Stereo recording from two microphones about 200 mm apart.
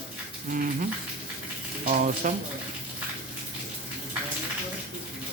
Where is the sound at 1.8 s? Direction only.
40° right (ahead or behind).